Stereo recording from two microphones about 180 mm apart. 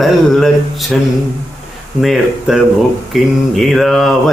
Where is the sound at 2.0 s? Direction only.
Centre (ahead or behind).